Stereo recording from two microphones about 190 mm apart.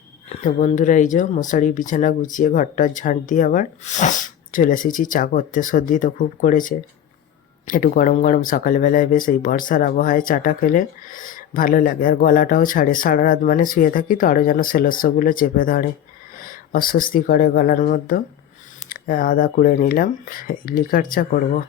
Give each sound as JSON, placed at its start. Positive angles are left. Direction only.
{"t": 0.3, "sound": "speech", "side_deg": 40}